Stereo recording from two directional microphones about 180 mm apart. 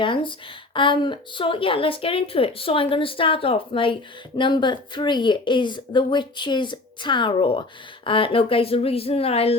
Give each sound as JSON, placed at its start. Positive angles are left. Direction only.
{"t": 0.0, "sound": "a woman's voice", "side_deg": 25}